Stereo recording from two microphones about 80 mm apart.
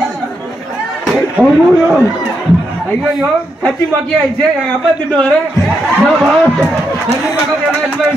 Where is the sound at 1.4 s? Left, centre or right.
Centre.